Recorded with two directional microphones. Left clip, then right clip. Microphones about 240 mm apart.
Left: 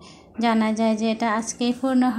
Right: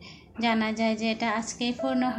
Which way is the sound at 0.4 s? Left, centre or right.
Centre.